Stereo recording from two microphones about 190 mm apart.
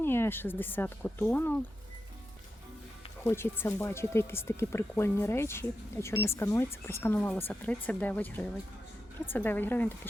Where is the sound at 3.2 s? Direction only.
10° left (ahead or behind).